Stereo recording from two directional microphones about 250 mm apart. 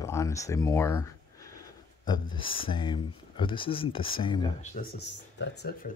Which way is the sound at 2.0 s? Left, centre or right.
Centre.